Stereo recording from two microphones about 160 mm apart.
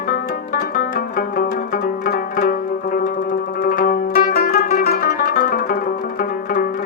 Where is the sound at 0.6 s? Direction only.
60° left (ahead or behind).